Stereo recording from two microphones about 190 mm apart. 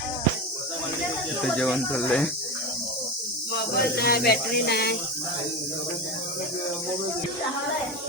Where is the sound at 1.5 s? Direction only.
Centre (ahead or behind).